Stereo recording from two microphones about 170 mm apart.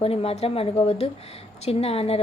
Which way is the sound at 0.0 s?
35° left (ahead or behind).